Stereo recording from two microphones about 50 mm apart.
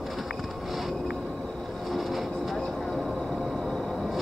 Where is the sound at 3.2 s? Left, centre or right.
Centre.